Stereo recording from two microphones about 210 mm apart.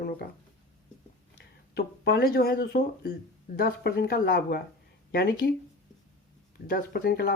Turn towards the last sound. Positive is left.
turn(degrees=50)  # may be behind; listen again after turning